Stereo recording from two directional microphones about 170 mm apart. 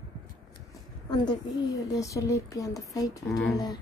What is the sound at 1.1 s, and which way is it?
A woman's voice, 25° left (ahead or behind).